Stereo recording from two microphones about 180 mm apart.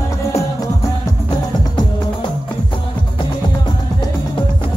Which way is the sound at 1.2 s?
25° left (ahead or behind).